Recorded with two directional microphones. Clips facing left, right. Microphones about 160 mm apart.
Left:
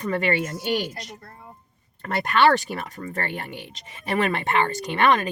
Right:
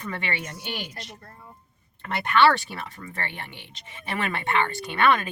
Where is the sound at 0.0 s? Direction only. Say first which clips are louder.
Left 8 dB; 40° left (ahead or behind).